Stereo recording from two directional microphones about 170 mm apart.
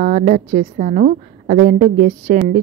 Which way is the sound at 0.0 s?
50° right (ahead or behind).